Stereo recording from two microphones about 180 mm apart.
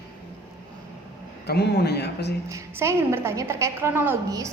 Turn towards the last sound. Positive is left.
turn(degrees=-20)  # may be behind; listen again after turning